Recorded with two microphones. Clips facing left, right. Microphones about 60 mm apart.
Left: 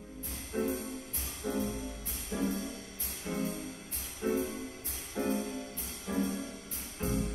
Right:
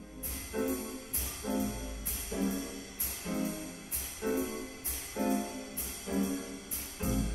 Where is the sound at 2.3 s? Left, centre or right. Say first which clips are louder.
Left 1 dB; centre.